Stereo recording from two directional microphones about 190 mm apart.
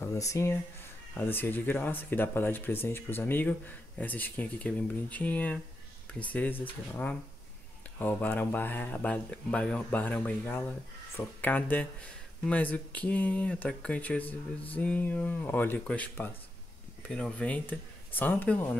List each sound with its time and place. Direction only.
0.0 s speech: 15° left (ahead or behind)